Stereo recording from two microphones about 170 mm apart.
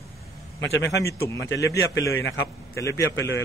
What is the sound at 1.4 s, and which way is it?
Speech, 90° left.